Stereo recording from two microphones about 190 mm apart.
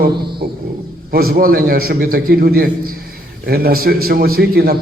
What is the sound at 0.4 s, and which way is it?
A man's voice, 60° right (ahead or behind).